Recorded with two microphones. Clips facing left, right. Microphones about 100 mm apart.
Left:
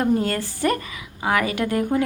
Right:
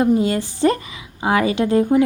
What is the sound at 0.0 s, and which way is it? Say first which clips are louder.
A woman's voice: right 4 dB; 20° right (ahead or behind).